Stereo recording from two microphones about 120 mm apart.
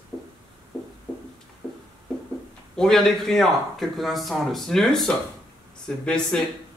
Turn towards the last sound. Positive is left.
turn(degrees=5)  # may be behind; listen again after turning